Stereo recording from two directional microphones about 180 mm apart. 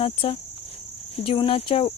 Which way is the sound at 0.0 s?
30° left (ahead or behind).